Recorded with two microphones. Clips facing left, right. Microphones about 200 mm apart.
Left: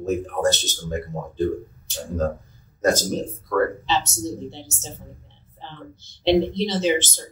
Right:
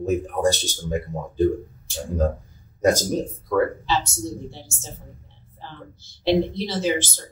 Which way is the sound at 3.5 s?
10° right (ahead or behind).